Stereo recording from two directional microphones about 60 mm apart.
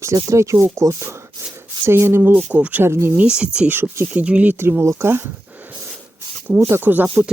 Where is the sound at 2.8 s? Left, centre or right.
Right.